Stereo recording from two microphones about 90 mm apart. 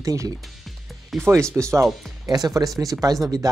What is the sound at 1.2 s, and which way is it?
Speech, 25° right (ahead or behind).